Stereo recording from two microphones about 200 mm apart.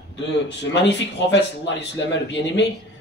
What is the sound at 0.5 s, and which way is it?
Speech, 60° left (ahead or behind).